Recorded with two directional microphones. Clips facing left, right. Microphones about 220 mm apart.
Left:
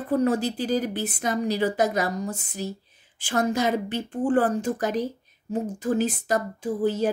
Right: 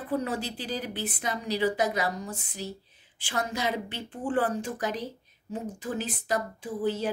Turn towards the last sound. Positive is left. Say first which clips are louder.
# left 5 dB
turn(degrees=45)  # may be behind; listen again after turning